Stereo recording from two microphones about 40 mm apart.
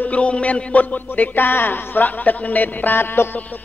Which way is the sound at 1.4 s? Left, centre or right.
Left.